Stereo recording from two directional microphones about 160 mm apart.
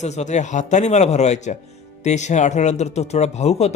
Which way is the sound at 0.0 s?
45° left (ahead or behind).